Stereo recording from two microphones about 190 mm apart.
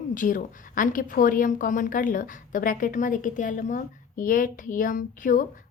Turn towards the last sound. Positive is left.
turn(degrees=45)  # may be behind; listen again after turning